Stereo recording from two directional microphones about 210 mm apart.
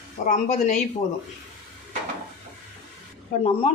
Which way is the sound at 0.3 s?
35° left (ahead or behind).